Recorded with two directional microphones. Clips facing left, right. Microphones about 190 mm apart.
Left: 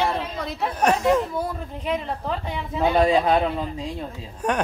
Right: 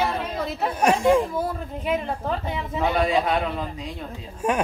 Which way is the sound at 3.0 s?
30° left (ahead or behind).